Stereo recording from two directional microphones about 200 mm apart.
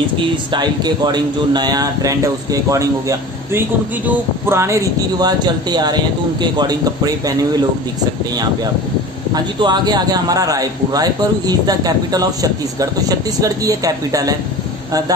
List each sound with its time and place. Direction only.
0.5 s a man's voice: 20° right (ahead or behind)
9.3 s a man's voice: 20° right (ahead or behind)